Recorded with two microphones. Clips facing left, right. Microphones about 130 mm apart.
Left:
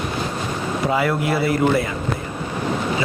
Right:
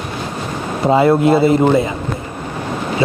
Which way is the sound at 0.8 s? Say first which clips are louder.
Right 10 dB; 25° right (ahead or behind).